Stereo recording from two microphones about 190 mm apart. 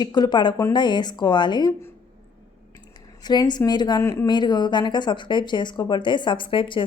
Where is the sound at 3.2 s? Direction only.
20° left (ahead or behind).